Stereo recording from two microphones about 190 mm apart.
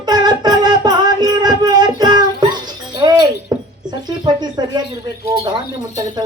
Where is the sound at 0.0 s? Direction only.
20° right (ahead or behind).